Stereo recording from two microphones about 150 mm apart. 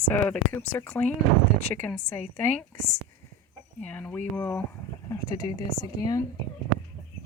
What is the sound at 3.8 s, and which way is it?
Speech, 10° left (ahead or behind).